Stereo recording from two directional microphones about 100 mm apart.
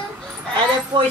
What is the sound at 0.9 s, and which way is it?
Speech, 50° right (ahead or behind).